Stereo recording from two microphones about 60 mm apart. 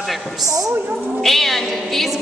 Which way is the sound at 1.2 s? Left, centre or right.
Centre.